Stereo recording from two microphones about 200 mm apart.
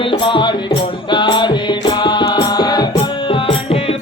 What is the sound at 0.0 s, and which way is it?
Music, 25° left (ahead or behind).